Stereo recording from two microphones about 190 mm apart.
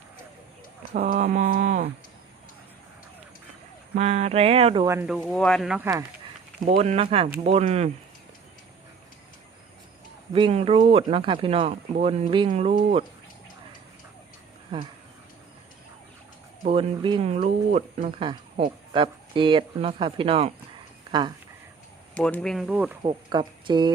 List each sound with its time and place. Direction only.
1.0 s a sound: 50° right (ahead or behind)
3.9 s speech: 35° right (ahead or behind)
5.0 s speech: centre (ahead or behind)
6.7 s speech: 35° right (ahead or behind)
10.3 s speech: 30° right (ahead or behind)
16.6 s speech: 30° right (ahead or behind)
22.1 s speech: 5° left (ahead or behind)
23.0 s speech: 25° right (ahead or behind)